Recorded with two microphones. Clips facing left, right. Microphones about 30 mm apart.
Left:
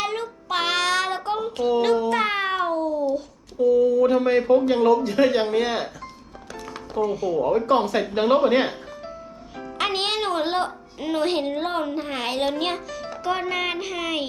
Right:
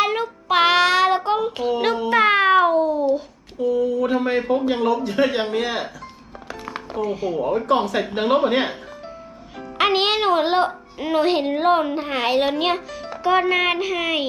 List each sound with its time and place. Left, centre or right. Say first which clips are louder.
0.0 s child singing: right 6 dB; right
1.8 s a sound: right 6 dB; right
5.0 s speech: left 1 dB; centre
6.5 s music: right 2 dB; right
7.5 s speech: right 1 dB; centre
9.7 s speech: right 6 dB; centre